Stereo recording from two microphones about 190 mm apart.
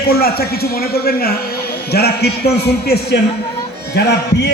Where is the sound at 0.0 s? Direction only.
55° left (ahead or behind).